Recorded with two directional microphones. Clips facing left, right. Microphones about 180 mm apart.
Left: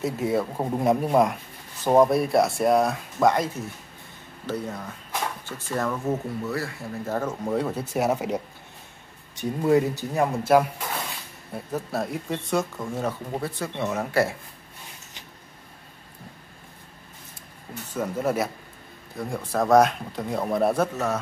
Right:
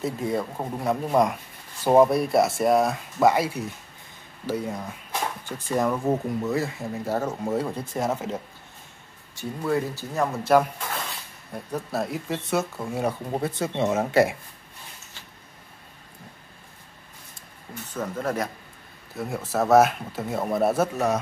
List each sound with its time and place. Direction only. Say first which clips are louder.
0.0 s speech: left 2 dB; centre (ahead or behind)
0.7 s speech: left 6 dB; 15° left (ahead or behind)
1.1 s speech: left 1 dB; centre (ahead or behind); by 6.9 s 20° right (ahead or behind)
7.1 s speech: even; 10° right (ahead or behind)
13.3 s speech: right 3 dB; 20° right (ahead or behind)
17.9 s speech: left 3 dB; 10° left (ahead or behind)
19.1 s speech: even; 5° right (ahead or behind)